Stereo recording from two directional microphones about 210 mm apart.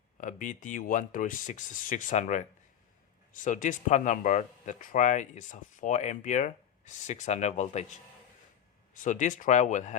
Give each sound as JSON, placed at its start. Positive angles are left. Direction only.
{"t": 0.2, "sound": "speech", "side_deg": 40}
{"t": 9.0, "sound": "speech", "side_deg": 35}